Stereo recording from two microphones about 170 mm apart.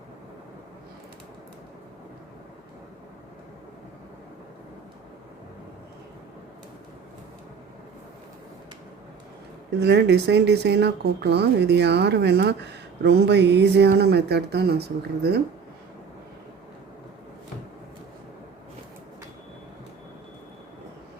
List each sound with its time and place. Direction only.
9.8 s speech: 80° right